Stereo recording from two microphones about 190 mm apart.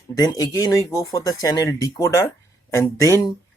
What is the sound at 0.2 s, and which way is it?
Speech, 20° left (ahead or behind).